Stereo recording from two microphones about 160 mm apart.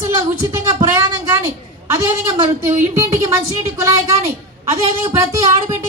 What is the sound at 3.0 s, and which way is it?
A woman's voice, 20° right (ahead or behind).